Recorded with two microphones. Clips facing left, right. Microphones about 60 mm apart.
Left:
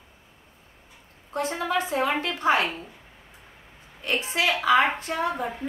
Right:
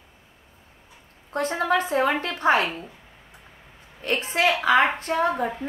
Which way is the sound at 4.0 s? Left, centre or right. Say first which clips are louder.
Right 3 dB; right.